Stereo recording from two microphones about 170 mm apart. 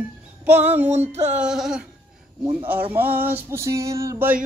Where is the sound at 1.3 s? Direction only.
5° right (ahead or behind).